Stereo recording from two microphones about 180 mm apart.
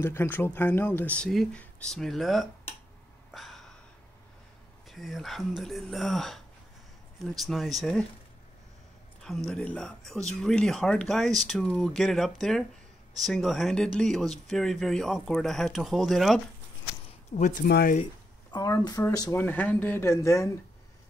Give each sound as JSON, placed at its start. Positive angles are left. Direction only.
{"t": 0.0, "sound": "speech", "side_deg": 10}
{"t": 3.3, "sound": "a sound", "side_deg": 0}
{"t": 4.8, "sound": "speech", "side_deg": 0}
{"t": 9.2, "sound": "speech", "side_deg": 0}
{"t": 17.4, "sound": "speech", "side_deg": 50}
{"t": 17.6, "sound": "speech", "side_deg": 60}
{"t": 18.5, "sound": "speech", "side_deg": 20}